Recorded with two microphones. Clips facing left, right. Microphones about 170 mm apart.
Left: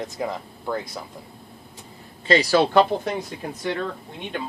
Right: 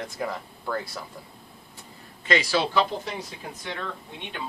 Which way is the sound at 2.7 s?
55° left (ahead or behind).